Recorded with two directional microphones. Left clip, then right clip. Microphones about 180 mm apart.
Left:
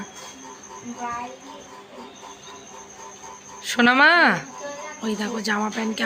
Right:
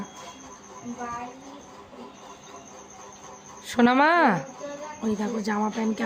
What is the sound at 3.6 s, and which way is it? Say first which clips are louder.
Speech: left 4 dB; 15° right (ahead or behind).